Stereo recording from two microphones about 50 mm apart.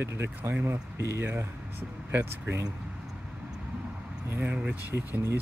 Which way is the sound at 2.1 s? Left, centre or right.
Right.